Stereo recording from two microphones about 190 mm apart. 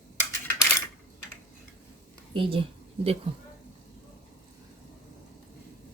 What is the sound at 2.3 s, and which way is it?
Speech, 30° right (ahead or behind).